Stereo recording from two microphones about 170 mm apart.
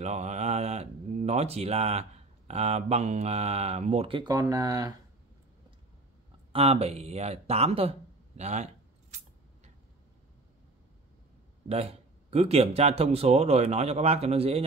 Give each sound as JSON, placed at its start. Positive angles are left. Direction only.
{"t": 0.0, "sound": "speech", "side_deg": -40}
{"t": 6.5, "sound": "speech", "side_deg": -35}
{"t": 8.4, "sound": "keys jangling", "side_deg": -40}
{"t": 11.7, "sound": "speech", "side_deg": -35}